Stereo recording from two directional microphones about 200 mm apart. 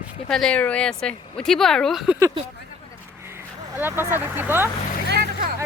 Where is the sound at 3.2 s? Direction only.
10° right (ahead or behind).